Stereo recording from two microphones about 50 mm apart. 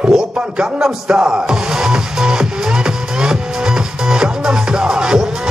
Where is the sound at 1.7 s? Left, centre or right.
Centre.